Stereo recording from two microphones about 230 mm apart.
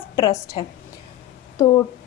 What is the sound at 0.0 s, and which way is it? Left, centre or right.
Speech, centre.